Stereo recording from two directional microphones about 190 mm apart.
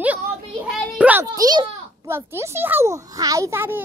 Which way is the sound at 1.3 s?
20° right (ahead or behind).